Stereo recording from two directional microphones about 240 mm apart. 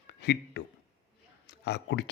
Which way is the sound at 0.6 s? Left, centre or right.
Left.